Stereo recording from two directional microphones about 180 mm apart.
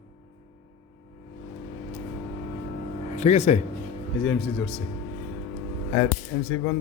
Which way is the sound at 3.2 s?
40° left (ahead or behind).